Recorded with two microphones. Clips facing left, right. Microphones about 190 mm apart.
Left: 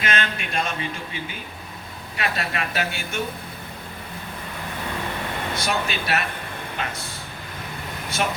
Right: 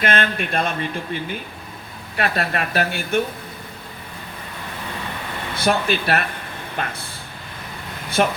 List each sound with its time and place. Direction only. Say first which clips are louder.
0.0 s speech: right 5 dB; 55° right (ahead or behind)
5.5 s speech: right 9 dB; 55° right (ahead or behind)
8.2 s speech: right 6 dB; 55° right (ahead or behind)